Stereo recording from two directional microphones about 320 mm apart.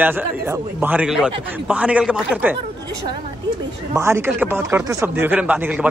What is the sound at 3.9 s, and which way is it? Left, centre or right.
A man's voice, centre.